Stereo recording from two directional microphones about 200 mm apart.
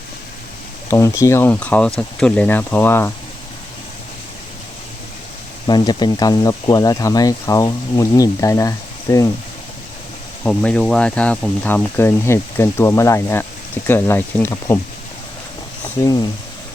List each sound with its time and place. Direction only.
0.9 s speech: 15° left (ahead or behind)
5.6 s speech: 20° left (ahead or behind)
10.4 s speech: 5° left (ahead or behind)
16.0 s speech: 20° left (ahead or behind)